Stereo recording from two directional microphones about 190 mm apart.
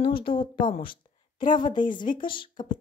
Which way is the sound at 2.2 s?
25° left (ahead or behind).